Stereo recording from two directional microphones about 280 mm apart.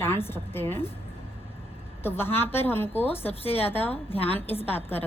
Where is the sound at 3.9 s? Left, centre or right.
Left.